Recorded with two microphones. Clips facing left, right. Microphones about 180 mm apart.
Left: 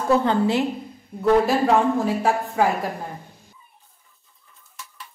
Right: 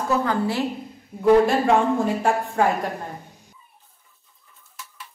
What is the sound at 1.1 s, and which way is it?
A woman's voice, 5° right (ahead or behind).